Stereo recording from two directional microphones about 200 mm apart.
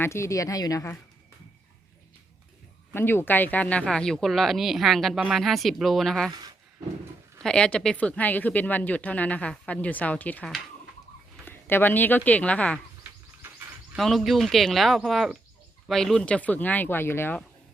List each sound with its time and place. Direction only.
0.0 s speech: 15° left (ahead or behind)
2.9 s speech: 10° left (ahead or behind)
7.4 s speech: 5° left (ahead or behind)
13.9 s speech: centre (ahead or behind)